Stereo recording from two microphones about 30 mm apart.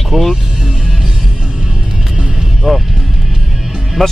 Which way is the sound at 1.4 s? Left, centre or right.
Right.